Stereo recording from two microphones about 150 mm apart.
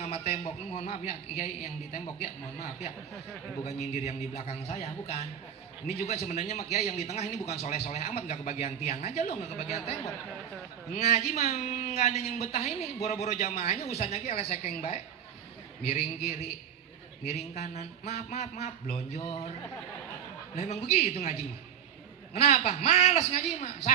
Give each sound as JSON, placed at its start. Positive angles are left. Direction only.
{"t": 0.0, "sound": "a man's voice", "side_deg": 45}
{"t": 3.6, "sound": "a man's voice", "side_deg": 45}
{"t": 11.0, "sound": "a man's voice", "side_deg": 45}
{"t": 20.5, "sound": "a man's voice", "side_deg": 45}